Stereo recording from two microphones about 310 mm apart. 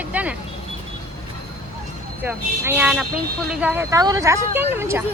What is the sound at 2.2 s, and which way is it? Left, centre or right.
Speech, centre.